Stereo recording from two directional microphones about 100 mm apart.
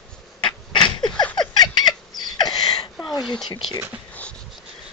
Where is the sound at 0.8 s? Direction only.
50° left (ahead or behind).